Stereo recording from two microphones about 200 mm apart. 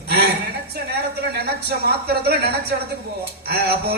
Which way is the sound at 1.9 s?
50° right (ahead or behind).